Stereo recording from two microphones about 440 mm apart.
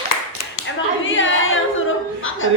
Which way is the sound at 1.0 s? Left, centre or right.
Left.